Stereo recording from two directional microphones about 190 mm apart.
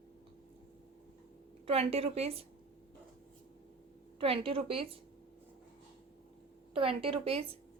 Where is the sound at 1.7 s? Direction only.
30° right (ahead or behind).